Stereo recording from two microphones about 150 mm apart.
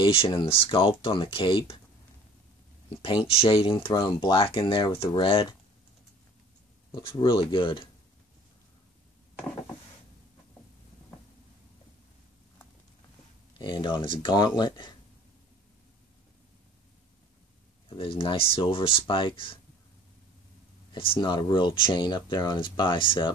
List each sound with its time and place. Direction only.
0.0 s speech: 35° left (ahead or behind)
3.0 s speech: 35° left (ahead or behind)
6.9 s speech: 35° left (ahead or behind)
13.6 s speech: 30° left (ahead or behind)
17.8 s speech: 35° left (ahead or behind)
20.9 s speech: 35° left (ahead or behind)